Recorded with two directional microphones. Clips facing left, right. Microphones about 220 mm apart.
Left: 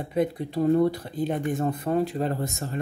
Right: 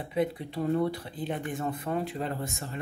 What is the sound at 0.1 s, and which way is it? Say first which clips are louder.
Speech: left 4 dB; 45° left (ahead or behind).